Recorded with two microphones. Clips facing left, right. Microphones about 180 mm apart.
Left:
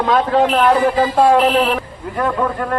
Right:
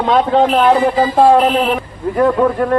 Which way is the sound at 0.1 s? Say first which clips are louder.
Right 3 dB; 25° right (ahead or behind).